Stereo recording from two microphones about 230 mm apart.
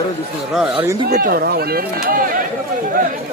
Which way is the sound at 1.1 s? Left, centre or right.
Right.